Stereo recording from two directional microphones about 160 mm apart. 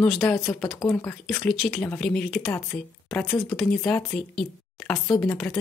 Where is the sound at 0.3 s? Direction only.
5° left (ahead or behind).